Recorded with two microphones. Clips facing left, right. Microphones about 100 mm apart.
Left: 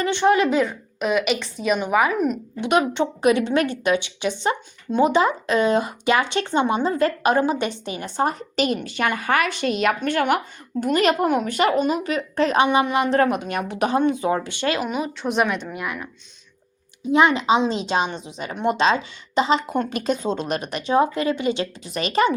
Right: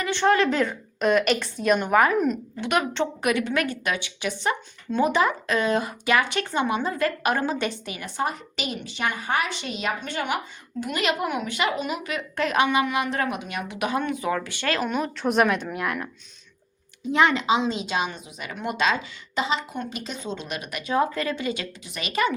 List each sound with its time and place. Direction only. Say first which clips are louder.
0.1 s a woman's voice: left 2 dB; 15° left (ahead or behind)
2.6 s a woman's voice: left 6 dB; 20° left (ahead or behind)
14.8 s a woman's voice: even; 5° left (ahead or behind)
17.1 s a woman's voice: left 3 dB; 20° left (ahead or behind); by 22.3 s 35° left (ahead or behind)